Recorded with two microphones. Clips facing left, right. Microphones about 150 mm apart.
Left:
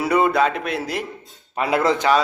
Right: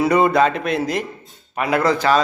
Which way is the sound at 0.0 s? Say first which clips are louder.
Right 3 dB; 5° left (ahead or behind).